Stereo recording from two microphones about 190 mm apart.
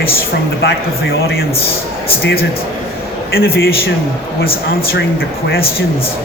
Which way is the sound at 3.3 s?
55° left (ahead or behind).